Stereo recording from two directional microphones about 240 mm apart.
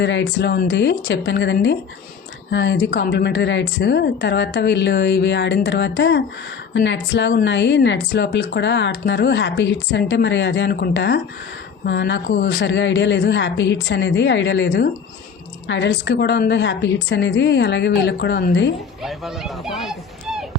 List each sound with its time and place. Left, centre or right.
0.0 s a woman's voice: left
19.0 s speech: centre